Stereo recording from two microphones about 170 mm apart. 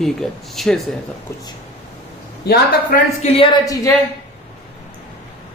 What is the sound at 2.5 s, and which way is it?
Speech, 70° left (ahead or behind).